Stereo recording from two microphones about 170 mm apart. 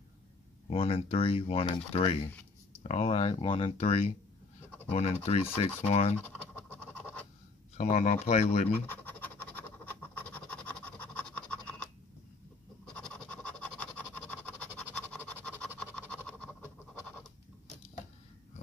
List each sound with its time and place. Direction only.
0.7 s speech: 35° left (ahead or behind)
6.3 s scratch: 10° left (ahead or behind)
7.7 s speech: 45° left (ahead or behind)
8.8 s scratch: 10° left (ahead or behind)
12.9 s scratch: 5° left (ahead or behind)
15.6 s pant: 10° left (ahead or behind)